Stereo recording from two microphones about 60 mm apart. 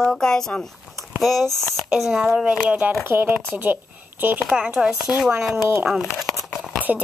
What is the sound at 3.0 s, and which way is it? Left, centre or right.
Speech, right.